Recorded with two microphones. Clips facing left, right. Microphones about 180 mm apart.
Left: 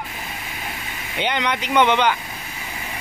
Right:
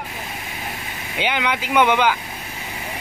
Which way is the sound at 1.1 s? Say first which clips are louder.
Even; 5° right (ahead or behind).